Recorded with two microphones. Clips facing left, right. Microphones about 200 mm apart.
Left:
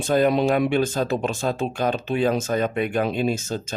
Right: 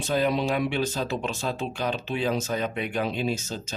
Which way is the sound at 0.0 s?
50° left (ahead or behind).